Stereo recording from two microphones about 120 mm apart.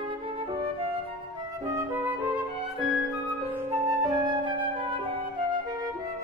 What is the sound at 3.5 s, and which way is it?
Flute, 20° right (ahead or behind).